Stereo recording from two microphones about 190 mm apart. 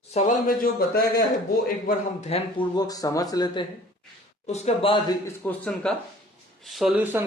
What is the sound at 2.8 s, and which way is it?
Speech, 20° left (ahead or behind).